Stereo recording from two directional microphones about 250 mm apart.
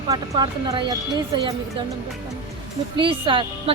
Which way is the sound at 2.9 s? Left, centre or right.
Centre.